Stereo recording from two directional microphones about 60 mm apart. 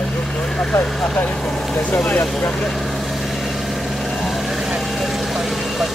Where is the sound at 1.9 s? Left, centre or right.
Left.